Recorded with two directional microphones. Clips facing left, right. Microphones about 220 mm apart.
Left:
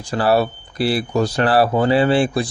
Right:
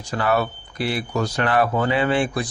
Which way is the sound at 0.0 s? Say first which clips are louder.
Left 5 dB; 30° left (ahead or behind).